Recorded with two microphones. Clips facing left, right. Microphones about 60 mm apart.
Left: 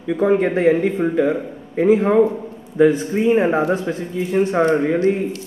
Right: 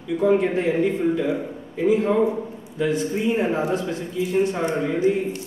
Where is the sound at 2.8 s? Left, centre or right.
Left.